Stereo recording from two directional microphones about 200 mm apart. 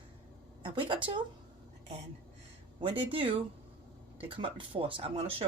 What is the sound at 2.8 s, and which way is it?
Speech, 25° right (ahead or behind).